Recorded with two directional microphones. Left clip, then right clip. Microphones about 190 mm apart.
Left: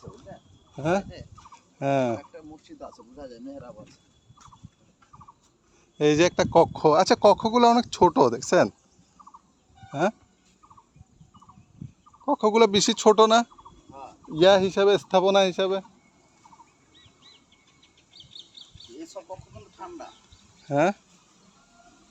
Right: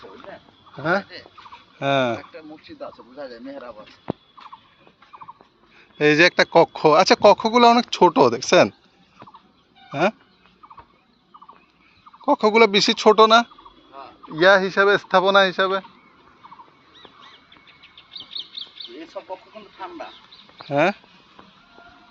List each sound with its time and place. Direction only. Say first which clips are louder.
0.8 s speech: right 4 dB; 35° left (ahead or behind)
1.8 s speech: right 4 dB; 25° left (ahead or behind)
2.7 s speech: right 7 dB; 40° left (ahead or behind)
6.0 s speech: right 5 dB; 20° left (ahead or behind)
9.9 s speech: right 5 dB; 15° left (ahead or behind)
12.2 s speech: right 6 dB; centre (ahead or behind)
12.5 s speech: right 4 dB; 20° left (ahead or behind)
14.5 s speech: right 4 dB; centre (ahead or behind)
14.8 s speech: right 3 dB; 30° left (ahead or behind)
18.2 s bird: right 12 dB; 55° left (ahead or behind)
20.7 s speech: right 3 dB; 25° left (ahead or behind)